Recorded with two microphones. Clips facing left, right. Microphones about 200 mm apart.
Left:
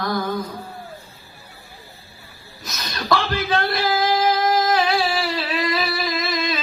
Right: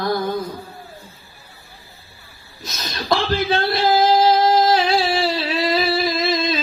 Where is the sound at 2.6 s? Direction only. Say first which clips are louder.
Right 1 dB; 30° right (ahead or behind).